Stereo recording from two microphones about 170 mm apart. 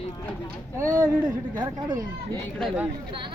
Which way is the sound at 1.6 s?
20° right (ahead or behind).